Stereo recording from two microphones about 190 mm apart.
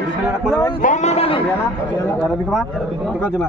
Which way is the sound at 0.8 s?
40° left (ahead or behind).